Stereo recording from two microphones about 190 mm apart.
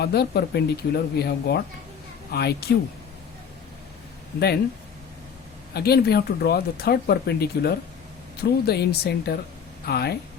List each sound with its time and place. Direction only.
0.0 s speech: 55° left (ahead or behind)
4.4 s speech: 60° left (ahead or behind)
5.7 s speech: 55° left (ahead or behind)